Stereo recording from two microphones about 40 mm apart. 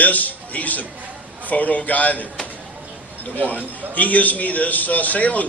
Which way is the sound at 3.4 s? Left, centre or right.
Left.